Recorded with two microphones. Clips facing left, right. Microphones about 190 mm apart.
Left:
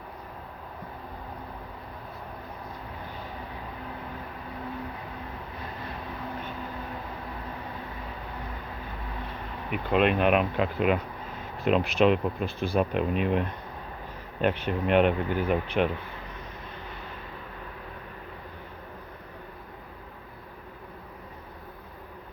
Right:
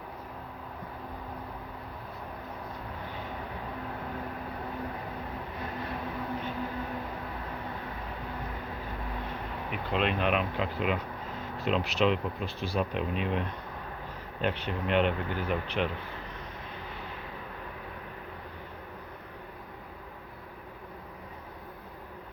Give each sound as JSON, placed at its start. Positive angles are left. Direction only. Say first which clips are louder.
{"t": 9.9, "sound": "speech", "louder": "left 6 dB", "side_deg": 55}
{"t": 14.4, "sound": "speech", "louder": "left 5 dB", "side_deg": 50}